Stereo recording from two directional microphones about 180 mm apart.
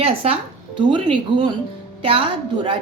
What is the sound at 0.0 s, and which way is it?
Speech, 30° right (ahead or behind).